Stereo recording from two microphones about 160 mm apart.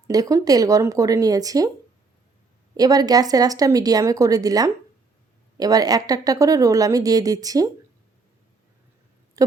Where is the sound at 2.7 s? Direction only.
25° right (ahead or behind).